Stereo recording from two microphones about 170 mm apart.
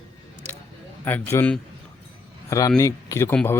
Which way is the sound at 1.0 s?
15° left (ahead or behind).